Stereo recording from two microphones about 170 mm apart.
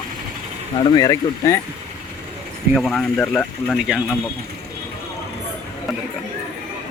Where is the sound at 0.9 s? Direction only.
20° left (ahead or behind).